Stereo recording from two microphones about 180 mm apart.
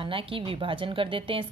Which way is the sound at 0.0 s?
30° right (ahead or behind).